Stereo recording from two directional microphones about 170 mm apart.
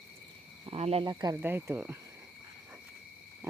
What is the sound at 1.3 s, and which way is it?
Speech, 10° right (ahead or behind).